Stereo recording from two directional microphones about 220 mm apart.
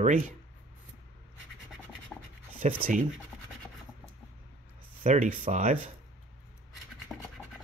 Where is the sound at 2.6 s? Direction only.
35° right (ahead or behind).